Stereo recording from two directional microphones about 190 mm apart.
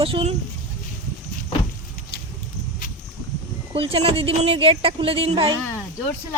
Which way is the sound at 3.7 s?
30° right (ahead or behind).